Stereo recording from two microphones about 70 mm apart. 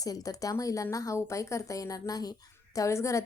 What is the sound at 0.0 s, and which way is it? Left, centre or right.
A woman's voice, left.